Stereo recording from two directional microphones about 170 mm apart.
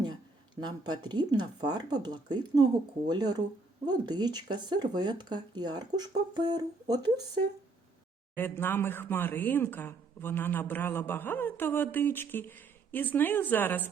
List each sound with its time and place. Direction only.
0.6 s speech: 25° right (ahead or behind)
8.4 s speech: 10° left (ahead or behind)